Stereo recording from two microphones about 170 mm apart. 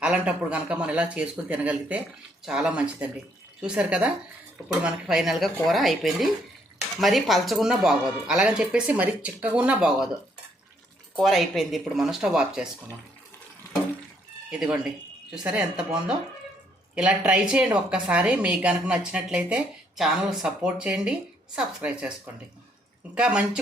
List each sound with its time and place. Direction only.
0.0 s a woman's voice: 5° right (ahead or behind)
11.2 s a woman's voice: centre (ahead or behind)
14.5 s a woman's voice: 5° right (ahead or behind)
23.1 s speech: 5° right (ahead or behind)